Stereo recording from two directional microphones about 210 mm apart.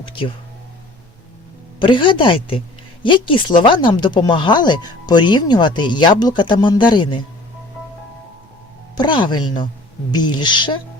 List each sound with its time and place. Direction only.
1.8 s speech: 25° left (ahead or behind)
9.0 s speech: 20° left (ahead or behind)